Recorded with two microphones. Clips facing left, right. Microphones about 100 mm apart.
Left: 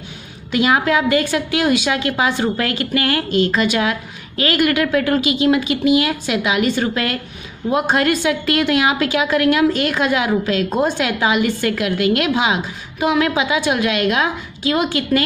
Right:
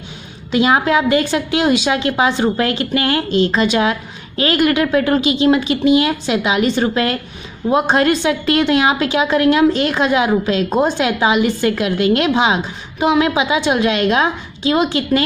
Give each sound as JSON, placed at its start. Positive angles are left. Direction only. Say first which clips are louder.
{"t": 0.5, "sound": "a woman's voice", "louder": "right 2 dB", "side_deg": -25}